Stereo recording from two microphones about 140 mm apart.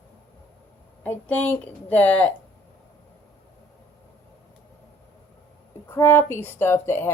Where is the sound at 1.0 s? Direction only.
10° left (ahead or behind).